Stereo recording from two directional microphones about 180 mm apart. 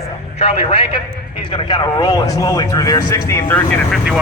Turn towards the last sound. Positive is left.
turn(degrees=15)  # may be behind; listen again after turning